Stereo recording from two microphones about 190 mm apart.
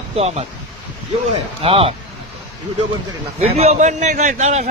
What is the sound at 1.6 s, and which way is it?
Speech, 30° right (ahead or behind).